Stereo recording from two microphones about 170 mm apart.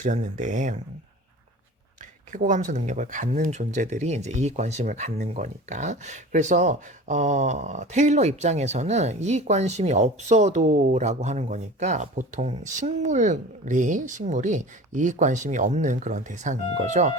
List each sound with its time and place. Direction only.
0.0 s speech: 45° right (ahead or behind)
2.3 s speech: 45° right (ahead or behind)